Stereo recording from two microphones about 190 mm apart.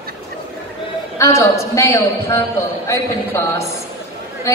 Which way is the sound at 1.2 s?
15° left (ahead or behind).